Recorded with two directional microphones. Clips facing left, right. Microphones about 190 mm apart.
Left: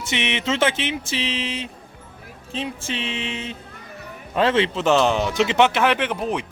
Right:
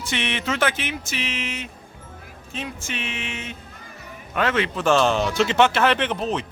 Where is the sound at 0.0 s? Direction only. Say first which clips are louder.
Left 2 dB; 20° left (ahead or behind).